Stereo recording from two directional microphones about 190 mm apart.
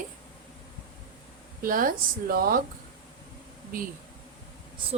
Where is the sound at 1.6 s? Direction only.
45° right (ahead or behind).